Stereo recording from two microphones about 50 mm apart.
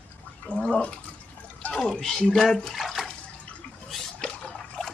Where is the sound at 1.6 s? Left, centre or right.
Left.